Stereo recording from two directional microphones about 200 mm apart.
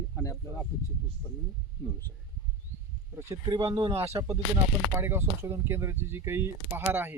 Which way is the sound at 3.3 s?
20° right (ahead or behind).